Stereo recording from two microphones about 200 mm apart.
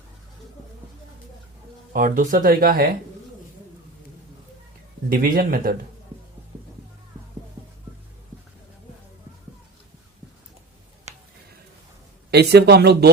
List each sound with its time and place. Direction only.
1.9 s speech: 45° right (ahead or behind)
5.0 s speech: 45° right (ahead or behind)
12.3 s speech: 55° right (ahead or behind)